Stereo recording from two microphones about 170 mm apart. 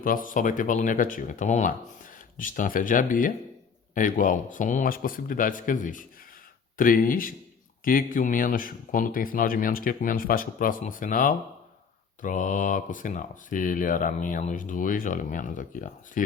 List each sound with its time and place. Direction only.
0.0 s speech: 55° left (ahead or behind)